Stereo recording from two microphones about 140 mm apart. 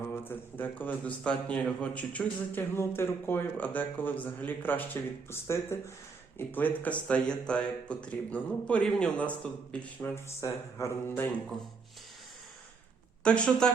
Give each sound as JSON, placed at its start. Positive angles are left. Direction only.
{"t": 0.1, "sound": "a man's voice", "side_deg": 15}
{"t": 13.2, "sound": "a man's voice", "side_deg": 5}